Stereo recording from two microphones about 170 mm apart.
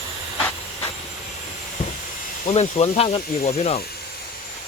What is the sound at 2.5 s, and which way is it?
Speech, 40° left (ahead or behind).